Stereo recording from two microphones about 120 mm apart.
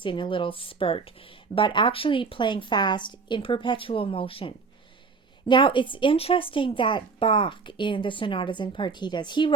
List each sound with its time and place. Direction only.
0.0 s speech: 45° left (ahead or behind)